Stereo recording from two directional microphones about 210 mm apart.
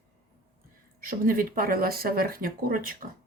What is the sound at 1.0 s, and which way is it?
Speech, 45° right (ahead or behind).